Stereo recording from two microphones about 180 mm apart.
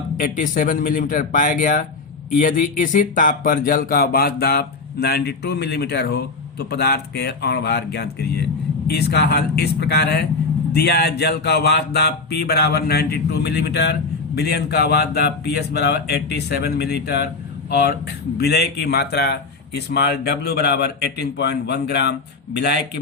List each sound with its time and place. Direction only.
0.2 s speech: 50° left (ahead or behind); by 22.8 s 70° left (ahead or behind)